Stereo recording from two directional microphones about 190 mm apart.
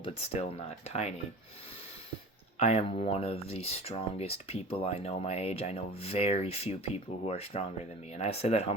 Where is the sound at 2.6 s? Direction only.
35° left (ahead or behind).